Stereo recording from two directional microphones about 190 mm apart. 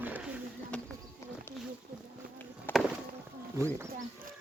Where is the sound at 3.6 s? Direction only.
15° right (ahead or behind).